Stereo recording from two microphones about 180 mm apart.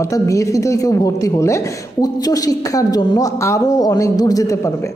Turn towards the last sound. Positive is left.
turn(degrees=15)  # may be behind; listen again after turning